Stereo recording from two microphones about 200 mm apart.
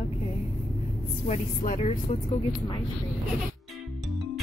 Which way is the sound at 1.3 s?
35° left (ahead or behind).